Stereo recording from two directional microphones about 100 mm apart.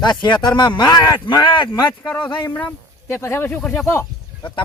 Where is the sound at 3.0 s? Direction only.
25° left (ahead or behind).